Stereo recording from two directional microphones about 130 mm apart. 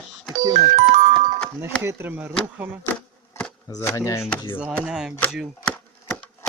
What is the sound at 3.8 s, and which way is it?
Speech, 25° left (ahead or behind).